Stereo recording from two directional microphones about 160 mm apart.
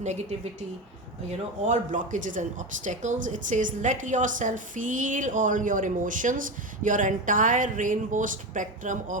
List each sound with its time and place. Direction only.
0.0 s speech: 45° right (ahead or behind)
1.6 s speech: 50° right (ahead or behind)